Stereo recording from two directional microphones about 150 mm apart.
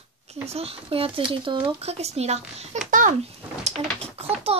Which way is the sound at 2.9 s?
60° right (ahead or behind).